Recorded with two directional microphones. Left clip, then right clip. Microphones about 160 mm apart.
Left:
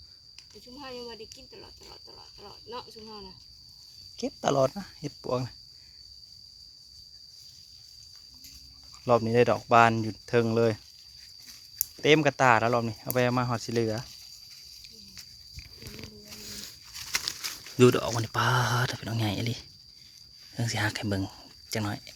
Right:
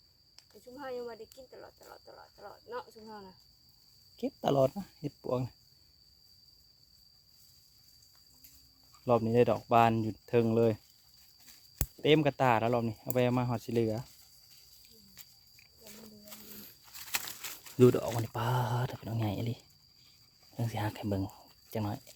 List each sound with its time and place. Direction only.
0.8 s speech: 10° right (ahead or behind)
9.0 s speech: centre (ahead or behind)
12.0 s speech: centre (ahead or behind)
16.6 s a sound: 25° right (ahead or behind)
17.7 s speech: centre (ahead or behind)